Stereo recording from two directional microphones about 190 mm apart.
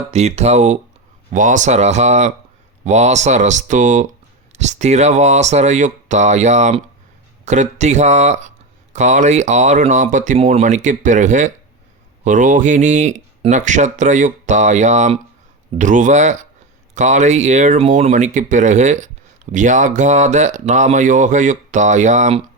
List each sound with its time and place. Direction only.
0.1 s speech: 35° right (ahead or behind)